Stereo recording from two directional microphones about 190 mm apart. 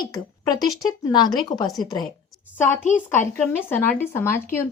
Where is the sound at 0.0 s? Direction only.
20° left (ahead or behind).